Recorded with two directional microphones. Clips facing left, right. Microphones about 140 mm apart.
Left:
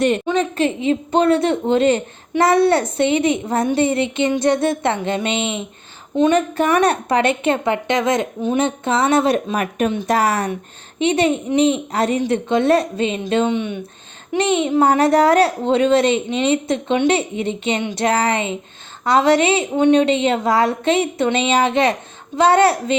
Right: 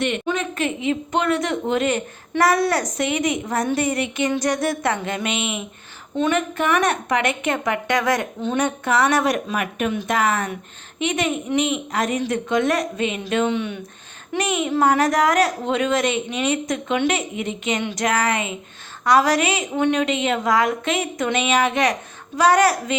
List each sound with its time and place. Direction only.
0.3 s a woman's voice: 30° left (ahead or behind)